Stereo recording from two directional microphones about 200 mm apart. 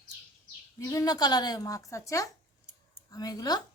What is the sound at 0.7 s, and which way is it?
A woman's voice, 15° left (ahead or behind).